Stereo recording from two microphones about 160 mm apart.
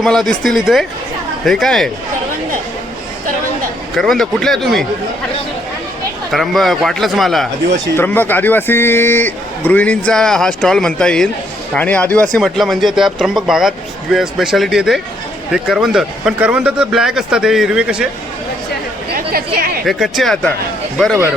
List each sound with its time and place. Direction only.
0.0 s speech: 5° left (ahead or behind)
3.9 s speech: centre (ahead or behind)
6.3 s speech: centre (ahead or behind)
7.9 s a man's voice: 10° left (ahead or behind); by 18.1 s 5° right (ahead or behind)
19.1 s a sound: 65° right (ahead or behind)
19.8 s speech: centre (ahead or behind)